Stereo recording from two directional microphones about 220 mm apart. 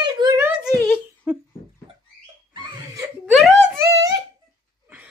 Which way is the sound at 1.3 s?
5° right (ahead or behind).